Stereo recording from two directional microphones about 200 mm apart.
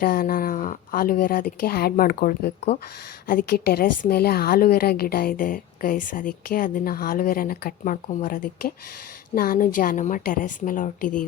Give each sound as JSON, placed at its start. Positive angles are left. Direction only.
{"t": 0.0, "sound": "a woman's voice", "side_deg": 45}